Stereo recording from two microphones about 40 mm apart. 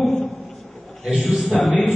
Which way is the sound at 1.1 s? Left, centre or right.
Centre.